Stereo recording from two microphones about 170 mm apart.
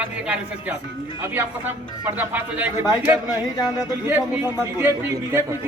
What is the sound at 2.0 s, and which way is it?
Speech, 10° right (ahead or behind).